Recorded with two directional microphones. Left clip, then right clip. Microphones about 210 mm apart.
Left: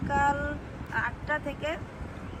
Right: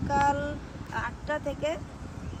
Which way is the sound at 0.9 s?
25° right (ahead or behind).